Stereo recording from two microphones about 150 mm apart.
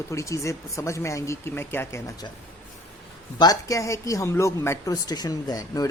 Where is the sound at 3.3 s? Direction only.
25° left (ahead or behind).